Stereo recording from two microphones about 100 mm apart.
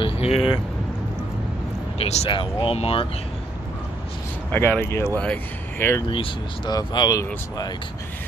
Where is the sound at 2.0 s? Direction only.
90° left.